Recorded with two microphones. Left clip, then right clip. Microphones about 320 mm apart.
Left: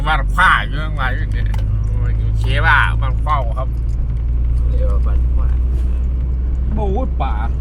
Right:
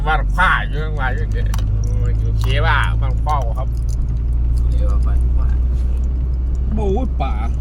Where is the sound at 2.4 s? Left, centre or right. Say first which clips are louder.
Left 5 dB; centre.